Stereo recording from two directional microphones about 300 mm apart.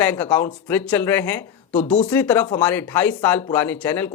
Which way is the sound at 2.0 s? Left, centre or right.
Centre.